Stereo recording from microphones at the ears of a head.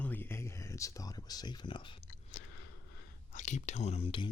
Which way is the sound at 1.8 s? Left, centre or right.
Left.